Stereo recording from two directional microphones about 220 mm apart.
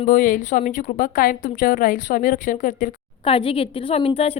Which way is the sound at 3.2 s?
25° left (ahead or behind).